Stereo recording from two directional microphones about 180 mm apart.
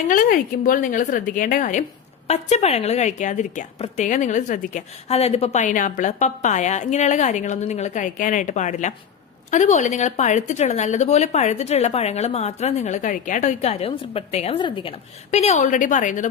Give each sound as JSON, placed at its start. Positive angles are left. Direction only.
{"t": 0.1, "sound": "a woman's voice", "side_deg": 50}
{"t": 15.3, "sound": "a woman's voice", "side_deg": 40}